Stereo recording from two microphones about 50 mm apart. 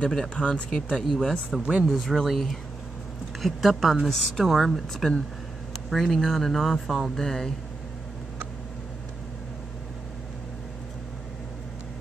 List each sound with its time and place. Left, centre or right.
0.0 s speech: centre
4.1 s speech: centre